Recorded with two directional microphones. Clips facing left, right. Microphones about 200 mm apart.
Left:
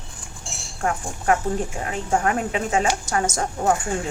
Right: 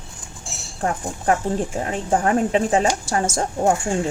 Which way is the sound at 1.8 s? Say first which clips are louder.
Right 1 dB; 30° right (ahead or behind).